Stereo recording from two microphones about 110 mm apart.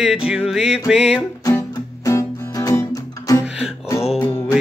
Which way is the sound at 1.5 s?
25° left (ahead or behind).